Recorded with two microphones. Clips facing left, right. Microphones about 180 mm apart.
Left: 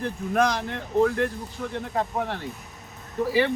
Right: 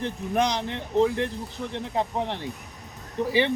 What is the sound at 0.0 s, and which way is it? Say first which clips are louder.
Speech: left 1 dB; 20° right (ahead or behind).